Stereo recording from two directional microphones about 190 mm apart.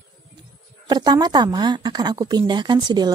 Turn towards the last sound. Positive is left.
turn(degrees=-20)  # may be behind; listen again after turning